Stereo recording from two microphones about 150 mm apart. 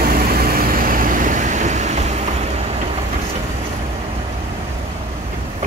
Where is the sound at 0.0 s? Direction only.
75° right (ahead or behind); by 2.0 s 50° right (ahead or behind).